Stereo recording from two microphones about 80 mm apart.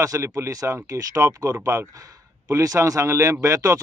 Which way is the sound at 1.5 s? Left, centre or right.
Right.